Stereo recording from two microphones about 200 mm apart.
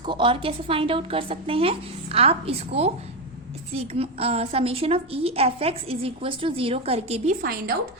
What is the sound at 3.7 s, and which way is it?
A woman's voice, 30° right (ahead or behind).